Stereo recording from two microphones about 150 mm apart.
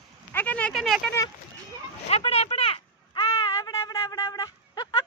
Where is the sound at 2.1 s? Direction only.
40° left (ahead or behind).